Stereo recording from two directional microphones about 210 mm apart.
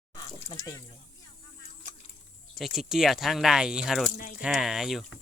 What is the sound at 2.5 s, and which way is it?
Speech, centre (ahead or behind).